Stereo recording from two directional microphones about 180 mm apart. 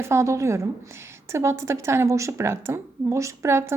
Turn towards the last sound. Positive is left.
turn(degrees=-15)  # may be behind; listen again after turning